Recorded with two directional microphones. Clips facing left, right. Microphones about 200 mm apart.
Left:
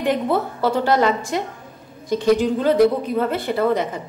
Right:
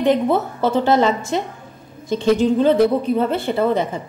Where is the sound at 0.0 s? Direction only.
20° right (ahead or behind).